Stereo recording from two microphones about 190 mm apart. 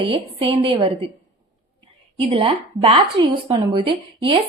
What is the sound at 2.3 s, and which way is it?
A woman's voice, 25° right (ahead or behind).